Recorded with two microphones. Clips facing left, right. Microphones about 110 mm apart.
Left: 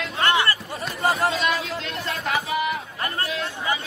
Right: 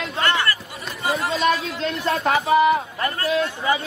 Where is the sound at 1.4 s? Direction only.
30° right (ahead or behind).